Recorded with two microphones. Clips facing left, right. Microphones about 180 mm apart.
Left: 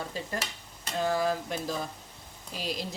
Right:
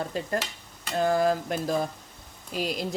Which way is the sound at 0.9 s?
50° right (ahead or behind).